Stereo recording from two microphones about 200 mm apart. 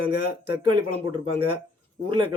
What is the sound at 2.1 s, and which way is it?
Speech, 25° right (ahead or behind).